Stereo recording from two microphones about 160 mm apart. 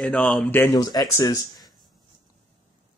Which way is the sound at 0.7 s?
25° left (ahead or behind).